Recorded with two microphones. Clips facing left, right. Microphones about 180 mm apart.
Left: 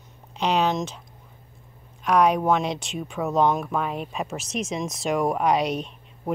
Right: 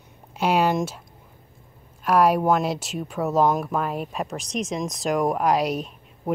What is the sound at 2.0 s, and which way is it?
Speech, 5° right (ahead or behind).